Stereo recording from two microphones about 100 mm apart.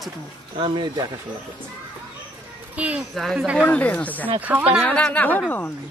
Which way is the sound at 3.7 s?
15° left (ahead or behind).